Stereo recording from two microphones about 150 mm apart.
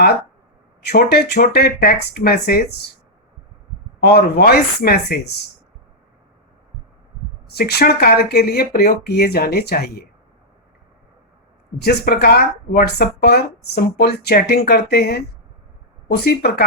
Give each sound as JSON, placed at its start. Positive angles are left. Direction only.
{"t": 0.9, "sound": "speech", "side_deg": 90}
{"t": 4.0, "sound": "speech", "side_deg": 90}
{"t": 7.4, "sound": "speech", "side_deg": 90}
{"t": 11.8, "sound": "speech", "side_deg": 90}